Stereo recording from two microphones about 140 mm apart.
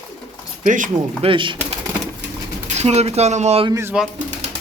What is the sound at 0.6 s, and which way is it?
Speech, 65° right (ahead or behind).